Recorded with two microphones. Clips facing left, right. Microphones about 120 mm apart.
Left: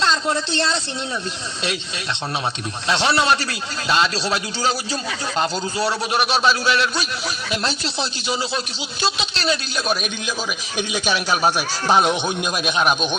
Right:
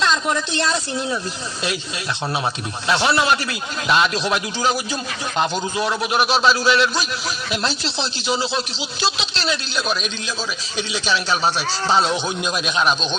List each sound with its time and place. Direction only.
0.0 s a woman's voice: 30° left (ahead or behind)
2.8 s speech: 30° left (ahead or behind)
6.2 s a man's voice: 25° right (ahead or behind)
9.7 s a man's voice: 50° left (ahead or behind)
11.1 s speech: 15° left (ahead or behind)